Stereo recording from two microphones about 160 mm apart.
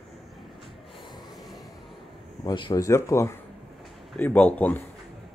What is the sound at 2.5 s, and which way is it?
Speech, 25° left (ahead or behind).